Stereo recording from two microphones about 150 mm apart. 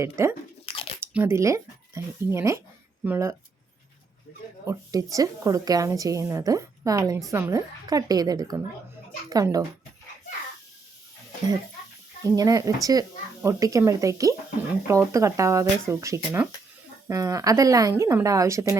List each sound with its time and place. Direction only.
0.0 s speech: 20° right (ahead or behind)
0.6 s biting: 40° left (ahead or behind)
1.0 s speech: 15° right (ahead or behind)
4.3 s speech: 90° left
4.6 s a woman's voice: 20° right (ahead or behind)
12.2 s a woman's voice: 25° right (ahead or behind)